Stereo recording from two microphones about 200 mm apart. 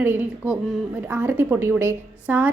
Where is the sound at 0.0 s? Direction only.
10° right (ahead or behind).